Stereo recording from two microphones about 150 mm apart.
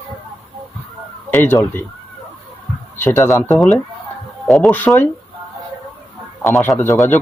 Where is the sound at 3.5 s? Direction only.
Centre (ahead or behind).